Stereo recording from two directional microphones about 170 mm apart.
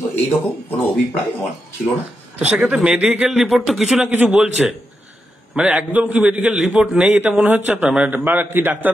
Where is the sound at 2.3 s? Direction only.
5° right (ahead or behind).